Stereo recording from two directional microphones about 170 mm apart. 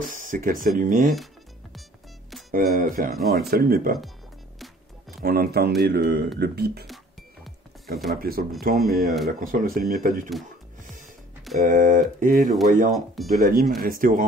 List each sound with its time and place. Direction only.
0.1 s speech: 50° right (ahead or behind)
1.1 s music: centre (ahead or behind)
2.5 s speech: 55° right (ahead or behind)
5.2 s speech: 65° right (ahead or behind)
5.8 s speech: 80° right
8.2 s speech: 60° right (ahead or behind)
8.7 s speech: centre (ahead or behind)
9.4 s speech: 55° right (ahead or behind)
11.6 s speech: 55° right (ahead or behind)
12.9 s speech: centre (ahead or behind)
13.4 s speech: 55° right (ahead or behind)